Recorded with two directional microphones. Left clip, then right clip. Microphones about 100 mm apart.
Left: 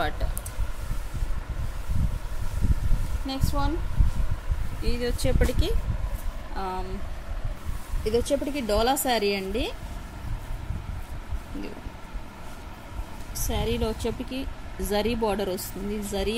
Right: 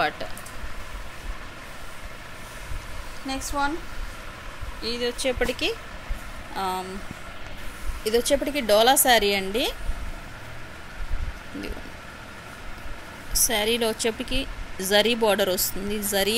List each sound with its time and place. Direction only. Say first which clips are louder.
3.3 s speech: right 4 dB; 20° left (ahead or behind)
4.8 s speech: right 3 dB; 45° left (ahead or behind)
5.4 s speech: right 4 dB; 25° left (ahead or behind)
6.5 s speech: right 4 dB; centre (ahead or behind)
8.0 s a woman's voice: right 3 dB; 10° left (ahead or behind)
13.3 s a woman's voice: right 7 dB; 5° left (ahead or behind)